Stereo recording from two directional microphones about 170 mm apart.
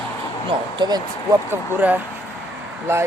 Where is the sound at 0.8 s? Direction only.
25° right (ahead or behind).